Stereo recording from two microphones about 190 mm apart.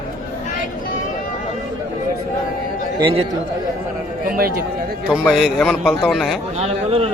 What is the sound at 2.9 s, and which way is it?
Speech, 30° right (ahead or behind).